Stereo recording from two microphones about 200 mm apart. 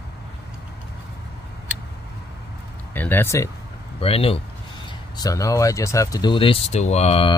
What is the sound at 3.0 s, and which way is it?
Speech, 10° left (ahead or behind).